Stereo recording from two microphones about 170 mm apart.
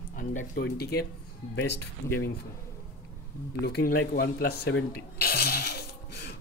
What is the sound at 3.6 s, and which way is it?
Speech, 75° left (ahead or behind).